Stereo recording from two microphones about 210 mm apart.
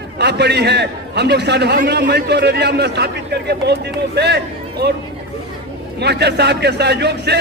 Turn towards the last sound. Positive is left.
turn(degrees=-50)  # may be behind; listen again after turning